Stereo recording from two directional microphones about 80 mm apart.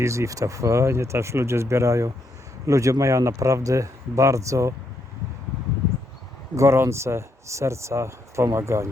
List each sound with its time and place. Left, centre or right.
0.0 s speech: right
6.6 s speech: right